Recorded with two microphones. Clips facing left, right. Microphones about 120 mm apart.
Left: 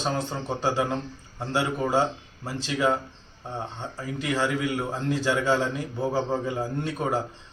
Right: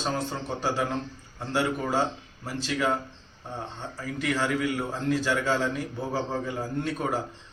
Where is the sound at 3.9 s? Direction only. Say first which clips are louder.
Left 1 dB; 20° left (ahead or behind).